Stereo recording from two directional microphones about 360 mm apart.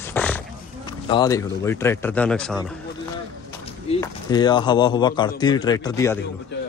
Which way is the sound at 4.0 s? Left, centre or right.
Centre.